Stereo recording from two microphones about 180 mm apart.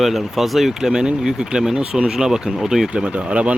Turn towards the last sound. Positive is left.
turn(degrees=-5)  # may be behind; listen again after turning